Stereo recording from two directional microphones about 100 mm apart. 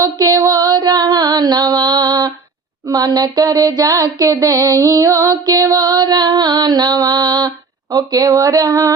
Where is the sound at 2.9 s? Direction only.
40° right (ahead or behind).